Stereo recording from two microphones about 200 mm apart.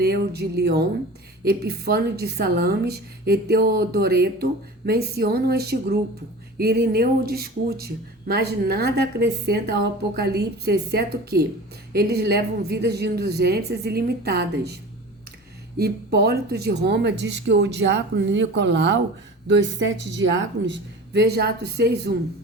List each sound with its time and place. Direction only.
0.0 s a woman's voice: 55° right (ahead or behind)
15.8 s speech: 50° right (ahead or behind)